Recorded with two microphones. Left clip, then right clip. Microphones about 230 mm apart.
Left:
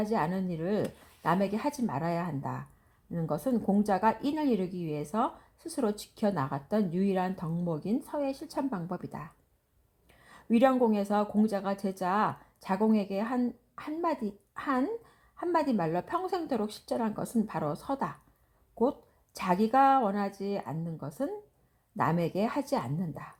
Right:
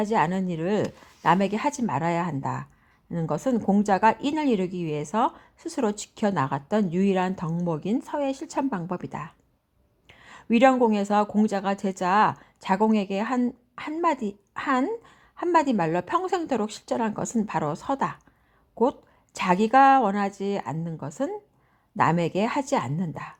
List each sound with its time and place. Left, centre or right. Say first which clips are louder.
0.0 s a woman's voice: right 7 dB; right